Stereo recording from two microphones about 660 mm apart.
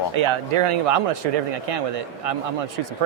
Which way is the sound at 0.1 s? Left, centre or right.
Right.